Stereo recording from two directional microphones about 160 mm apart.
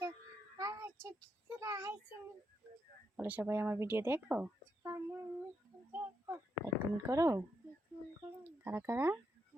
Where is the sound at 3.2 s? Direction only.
10° right (ahead or behind).